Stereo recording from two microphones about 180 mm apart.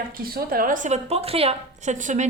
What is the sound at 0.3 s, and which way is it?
A woman's voice, 55° right (ahead or behind).